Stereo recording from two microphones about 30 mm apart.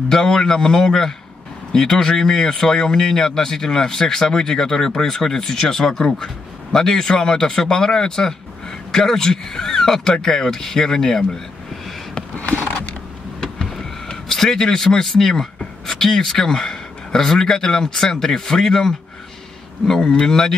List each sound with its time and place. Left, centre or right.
0.2 s speech: left
14.3 s speech: centre
19.9 s speech: left